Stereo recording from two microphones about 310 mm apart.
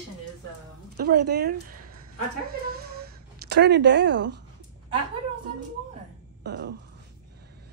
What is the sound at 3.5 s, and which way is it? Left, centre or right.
Speech, right.